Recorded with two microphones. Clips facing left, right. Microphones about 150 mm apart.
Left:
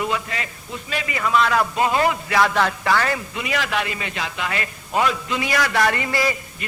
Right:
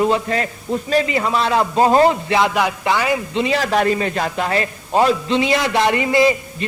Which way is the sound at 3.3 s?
30° right (ahead or behind).